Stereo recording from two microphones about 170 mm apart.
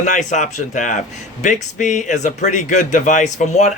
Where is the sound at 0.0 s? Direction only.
45° left (ahead or behind).